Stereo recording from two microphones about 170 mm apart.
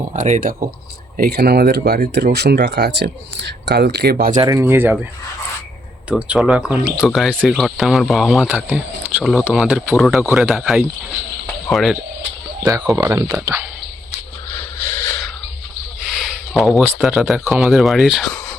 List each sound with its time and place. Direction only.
0.1 s speech: 50° right (ahead or behind)
1.1 s speech: 65° right (ahead or behind)
4.4 s speech: 20° right (ahead or behind)
6.1 s speech: 10° right (ahead or behind)
10.5 s speech: centre (ahead or behind)
12.9 s speech: 20° right (ahead or behind)
16.1 s a sound: centre (ahead or behind)
17.0 s speech: centre (ahead or behind)